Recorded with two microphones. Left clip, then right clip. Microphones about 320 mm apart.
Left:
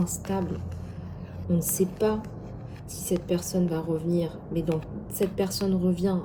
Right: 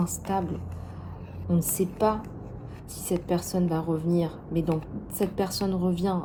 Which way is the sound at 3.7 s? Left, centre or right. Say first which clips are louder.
Right 1 dB; centre.